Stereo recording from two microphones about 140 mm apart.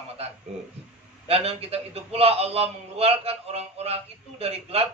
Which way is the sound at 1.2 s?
45° right (ahead or behind).